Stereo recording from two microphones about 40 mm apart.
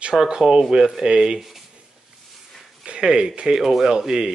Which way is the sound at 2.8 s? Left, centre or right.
Right.